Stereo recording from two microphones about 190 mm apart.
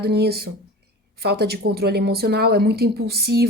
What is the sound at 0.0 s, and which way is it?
A woman's voice, 60° right (ahead or behind).